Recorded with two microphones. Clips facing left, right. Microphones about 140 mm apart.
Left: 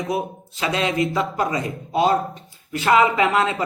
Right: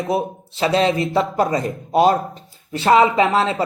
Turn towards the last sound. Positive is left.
turn(degrees=-30)  # may be behind; listen again after turning